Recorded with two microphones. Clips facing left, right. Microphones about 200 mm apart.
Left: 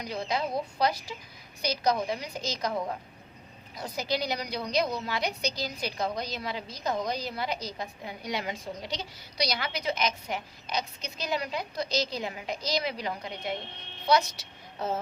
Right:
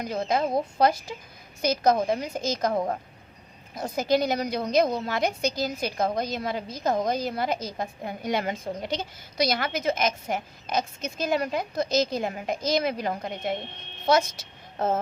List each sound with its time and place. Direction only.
0.0 s a woman's voice: 50° right (ahead or behind)